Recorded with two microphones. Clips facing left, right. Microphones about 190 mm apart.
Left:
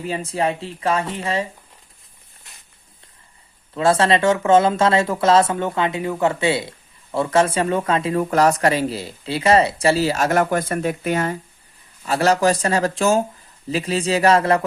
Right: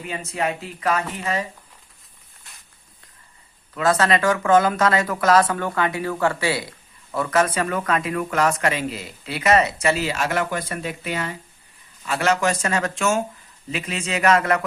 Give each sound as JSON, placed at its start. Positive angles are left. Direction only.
{"t": 0.0, "sound": "speech", "side_deg": 35}
{"t": 3.8, "sound": "speech", "side_deg": 30}